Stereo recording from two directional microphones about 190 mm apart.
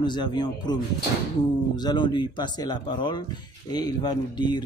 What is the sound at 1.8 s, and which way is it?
Speech, 20° left (ahead or behind).